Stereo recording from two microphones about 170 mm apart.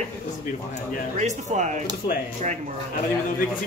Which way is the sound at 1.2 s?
45° right (ahead or behind).